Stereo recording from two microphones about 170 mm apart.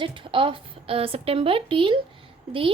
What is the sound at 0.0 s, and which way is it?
A woman's voice, 30° right (ahead or behind).